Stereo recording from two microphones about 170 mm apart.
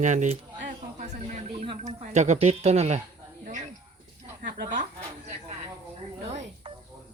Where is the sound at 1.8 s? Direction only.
45° right (ahead or behind).